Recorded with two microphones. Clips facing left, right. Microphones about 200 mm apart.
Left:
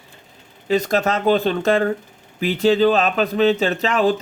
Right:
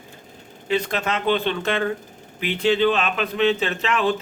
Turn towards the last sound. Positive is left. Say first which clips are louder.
# left 4 dB
turn(degrees=35)  # may be behind; listen again after turning